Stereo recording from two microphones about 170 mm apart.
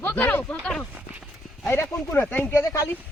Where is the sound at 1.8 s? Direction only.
10° left (ahead or behind).